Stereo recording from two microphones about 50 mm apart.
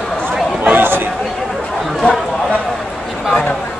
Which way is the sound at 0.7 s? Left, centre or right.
Right.